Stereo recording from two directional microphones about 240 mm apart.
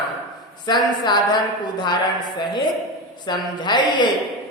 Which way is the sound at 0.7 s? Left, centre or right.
Centre.